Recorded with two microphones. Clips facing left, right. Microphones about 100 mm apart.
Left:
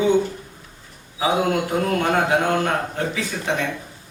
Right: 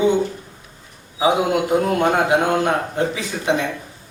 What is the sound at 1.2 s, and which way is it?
A man's voice, 15° right (ahead or behind).